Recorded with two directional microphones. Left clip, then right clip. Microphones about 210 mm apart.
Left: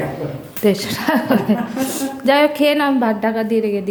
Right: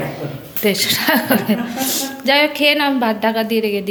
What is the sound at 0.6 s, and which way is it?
A woman's voice, 15° left (ahead or behind).